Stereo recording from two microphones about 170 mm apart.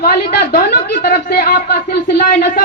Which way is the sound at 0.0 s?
60° left (ahead or behind).